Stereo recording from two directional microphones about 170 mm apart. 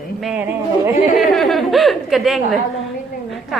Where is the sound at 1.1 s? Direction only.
Centre (ahead or behind).